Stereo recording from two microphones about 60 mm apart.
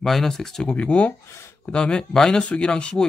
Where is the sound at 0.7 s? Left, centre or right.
Centre.